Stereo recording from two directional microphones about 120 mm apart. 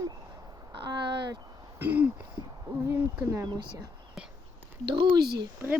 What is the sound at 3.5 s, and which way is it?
Speech, 40° right (ahead or behind).